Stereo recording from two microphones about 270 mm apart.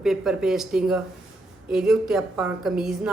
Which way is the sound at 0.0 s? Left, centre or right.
Centre.